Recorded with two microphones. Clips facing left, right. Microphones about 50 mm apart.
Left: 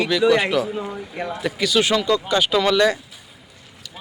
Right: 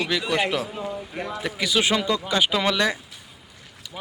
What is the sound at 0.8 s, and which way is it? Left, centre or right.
Speech, left.